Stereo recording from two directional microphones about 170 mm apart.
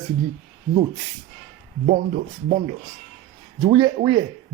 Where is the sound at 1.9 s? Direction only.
55° right (ahead or behind).